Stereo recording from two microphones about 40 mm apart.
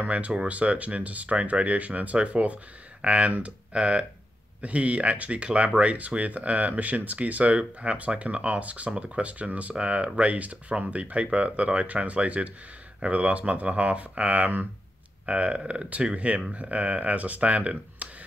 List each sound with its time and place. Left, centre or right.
0.0 s speech: right
15.2 s speech: right